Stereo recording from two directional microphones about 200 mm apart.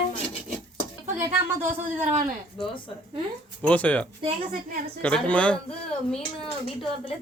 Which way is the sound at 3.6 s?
5° left (ahead or behind).